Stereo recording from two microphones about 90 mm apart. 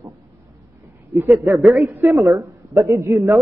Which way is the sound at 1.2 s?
35° right (ahead or behind).